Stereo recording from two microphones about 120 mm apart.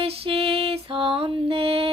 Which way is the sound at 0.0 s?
55° right (ahead or behind).